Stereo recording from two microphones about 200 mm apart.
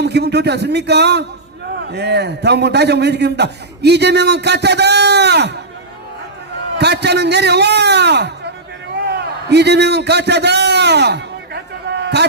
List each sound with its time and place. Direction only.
0.0 s a man's voice: 55° right (ahead or behind)
6.7 s a man's voice: 55° right (ahead or behind)
9.5 s a man's voice: 55° right (ahead or behind)